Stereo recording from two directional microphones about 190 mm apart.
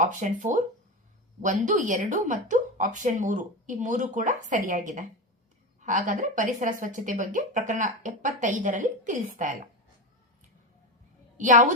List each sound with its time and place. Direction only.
0.0 s a woman's voice: 40° right (ahead or behind)
11.3 s a woman's voice: 40° right (ahead or behind)